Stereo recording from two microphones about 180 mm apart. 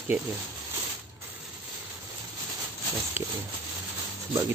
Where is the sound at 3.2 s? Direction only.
10° right (ahead or behind).